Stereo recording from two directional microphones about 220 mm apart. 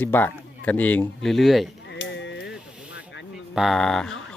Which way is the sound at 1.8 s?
55° left (ahead or behind).